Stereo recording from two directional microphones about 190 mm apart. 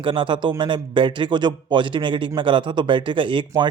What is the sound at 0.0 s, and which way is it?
A man's voice, 25° right (ahead or behind).